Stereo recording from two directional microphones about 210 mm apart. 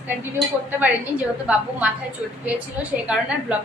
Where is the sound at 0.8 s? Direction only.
5° right (ahead or behind).